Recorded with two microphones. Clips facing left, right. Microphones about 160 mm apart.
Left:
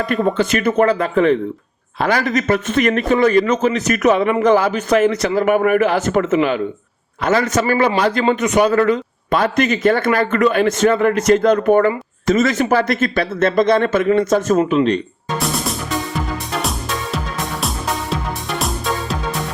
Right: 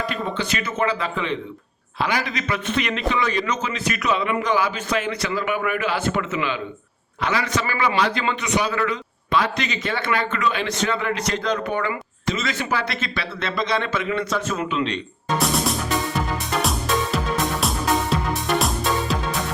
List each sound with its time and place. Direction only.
0.3 s a man's voice: 55° left (ahead or behind)
15.4 s music: centre (ahead or behind)